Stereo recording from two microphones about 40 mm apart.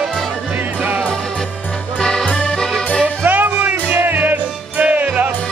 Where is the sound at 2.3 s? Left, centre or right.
Left.